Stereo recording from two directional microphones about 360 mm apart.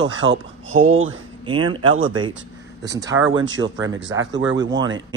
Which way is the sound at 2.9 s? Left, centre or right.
Centre.